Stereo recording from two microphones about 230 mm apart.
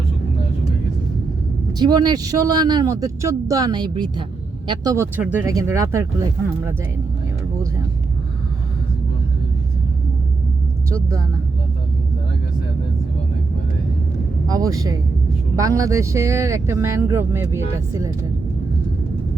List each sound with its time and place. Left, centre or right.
1.8 s speech: centre
14.4 s speech: centre